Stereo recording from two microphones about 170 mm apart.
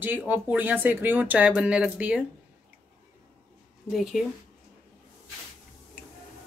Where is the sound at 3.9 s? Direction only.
Centre (ahead or behind).